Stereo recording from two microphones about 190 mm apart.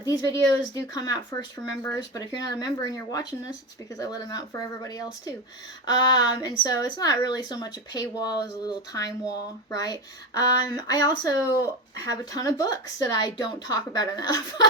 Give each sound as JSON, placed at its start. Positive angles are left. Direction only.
{"t": 0.0, "sound": "speech", "side_deg": 20}